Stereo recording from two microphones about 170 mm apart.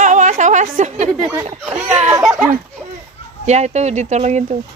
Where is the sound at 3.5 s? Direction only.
40° right (ahead or behind).